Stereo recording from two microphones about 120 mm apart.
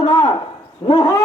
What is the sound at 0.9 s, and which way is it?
Speech, 30° left (ahead or behind).